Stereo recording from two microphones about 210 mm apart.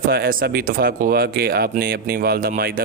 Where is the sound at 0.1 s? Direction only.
45° right (ahead or behind).